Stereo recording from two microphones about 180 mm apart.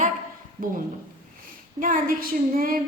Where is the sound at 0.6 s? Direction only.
50° right (ahead or behind).